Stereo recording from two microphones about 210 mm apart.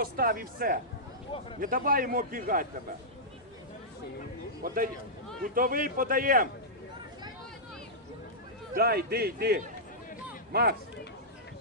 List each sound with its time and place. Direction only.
0.0 s a man's voice: 45° right (ahead or behind)
4.6 s a man's voice: 45° right (ahead or behind)
8.7 s a man's voice: 50° right (ahead or behind)